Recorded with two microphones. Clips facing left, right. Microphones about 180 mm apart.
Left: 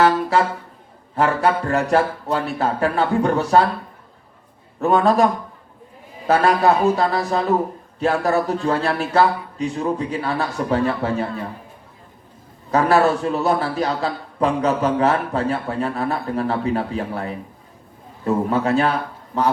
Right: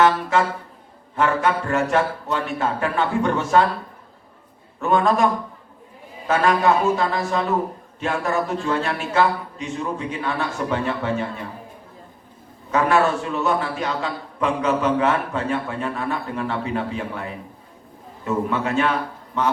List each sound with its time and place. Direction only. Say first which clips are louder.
0.0 s music: left 1 dB; 35° left (ahead or behind)
1.1 s a man's voice: left 2 dB; 35° left (ahead or behind)
4.8 s a man's voice: left 3 dB; 35° left (ahead or behind)
12.7 s a man's voice: left 3 dB; 35° left (ahead or behind)